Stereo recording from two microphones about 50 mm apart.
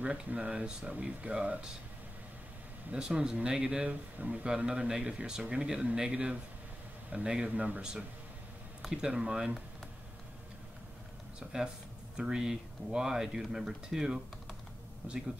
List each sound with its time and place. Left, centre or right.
0.0 s speech: right
2.9 s speech: centre
3.9 s speech: right
8.9 s speech: centre
11.3 s speech: centre